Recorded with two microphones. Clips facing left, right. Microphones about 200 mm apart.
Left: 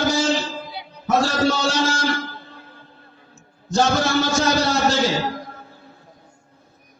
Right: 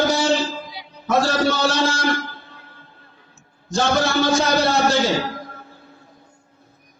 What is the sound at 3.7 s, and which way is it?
A man's voice, 60° right (ahead or behind).